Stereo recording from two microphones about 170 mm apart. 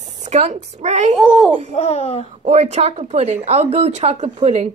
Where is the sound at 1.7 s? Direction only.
35° left (ahead or behind).